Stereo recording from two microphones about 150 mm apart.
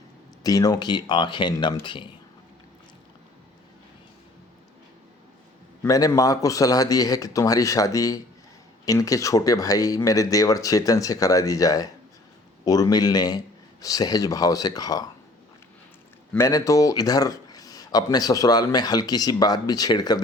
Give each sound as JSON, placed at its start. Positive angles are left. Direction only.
{"t": 0.4, "sound": "speech", "side_deg": 25}
{"t": 5.8, "sound": "a man's voice", "side_deg": 20}
{"t": 16.5, "sound": "a man's voice", "side_deg": 20}